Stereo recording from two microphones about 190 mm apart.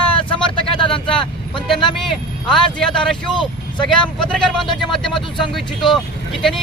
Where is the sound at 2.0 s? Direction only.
Centre (ahead or behind).